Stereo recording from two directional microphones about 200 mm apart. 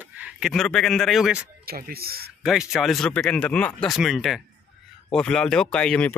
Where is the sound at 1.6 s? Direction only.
50° right (ahead or behind).